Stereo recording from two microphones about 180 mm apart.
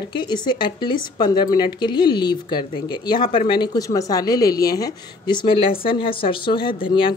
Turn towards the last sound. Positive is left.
turn(degrees=30)  # may be behind; listen again after turning